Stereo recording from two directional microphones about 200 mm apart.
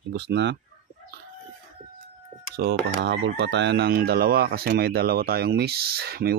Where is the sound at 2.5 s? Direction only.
60° right (ahead or behind).